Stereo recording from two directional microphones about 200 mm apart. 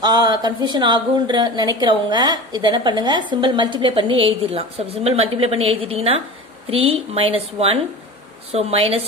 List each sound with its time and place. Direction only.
0.0 s a woman's voice: 20° right (ahead or behind)